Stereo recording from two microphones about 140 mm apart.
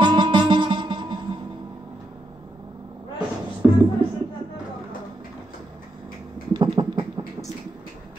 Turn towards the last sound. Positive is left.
turn(degrees=-35)  # may be behind; listen again after turning